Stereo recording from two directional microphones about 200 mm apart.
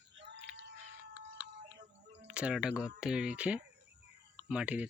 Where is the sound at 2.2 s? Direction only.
5° right (ahead or behind).